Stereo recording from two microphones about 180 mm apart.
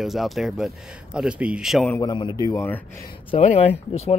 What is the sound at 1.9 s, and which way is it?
Speech, 25° left (ahead or behind).